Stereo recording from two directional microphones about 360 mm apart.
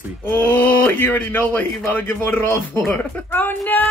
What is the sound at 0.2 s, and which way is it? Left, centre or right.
A man's voice, centre.